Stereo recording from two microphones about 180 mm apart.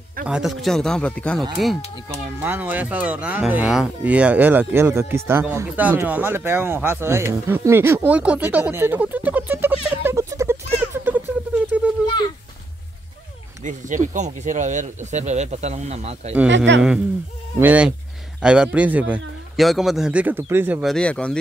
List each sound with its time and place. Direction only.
0.3 s speech: centre (ahead or behind)
10.0 s a sound: 15° right (ahead or behind)
13.7 s speech: 45° right (ahead or behind)
16.4 s speech: 85° right
17.6 s speech: 10° right (ahead or behind)
20.8 s speech: 5° left (ahead or behind)